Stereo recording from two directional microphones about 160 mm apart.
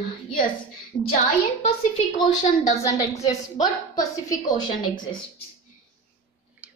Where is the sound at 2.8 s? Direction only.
20° left (ahead or behind).